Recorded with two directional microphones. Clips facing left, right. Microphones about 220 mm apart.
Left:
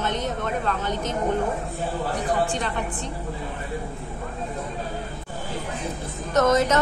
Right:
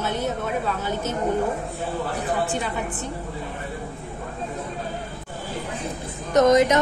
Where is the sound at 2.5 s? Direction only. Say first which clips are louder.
Right 1 dB; 5° right (ahead or behind).